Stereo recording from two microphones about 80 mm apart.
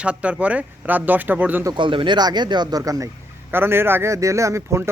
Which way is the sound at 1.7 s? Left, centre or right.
Right.